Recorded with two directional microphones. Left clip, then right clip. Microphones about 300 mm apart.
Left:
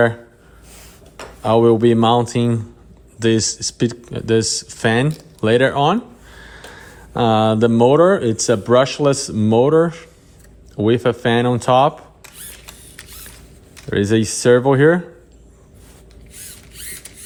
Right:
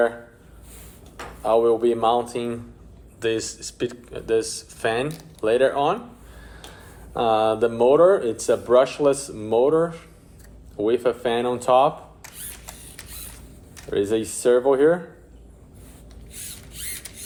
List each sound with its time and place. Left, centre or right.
1.4 s speech: left
7.2 s speech: left
12.2 s a sound: centre
13.9 s speech: left
16.3 s mechanisms: centre